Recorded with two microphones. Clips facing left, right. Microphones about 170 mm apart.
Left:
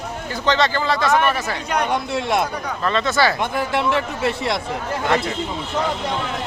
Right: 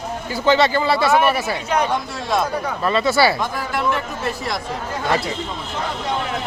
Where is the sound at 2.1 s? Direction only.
20° left (ahead or behind).